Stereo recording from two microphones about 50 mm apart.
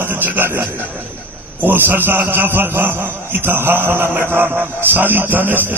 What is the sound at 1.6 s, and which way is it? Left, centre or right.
A man's voice, right.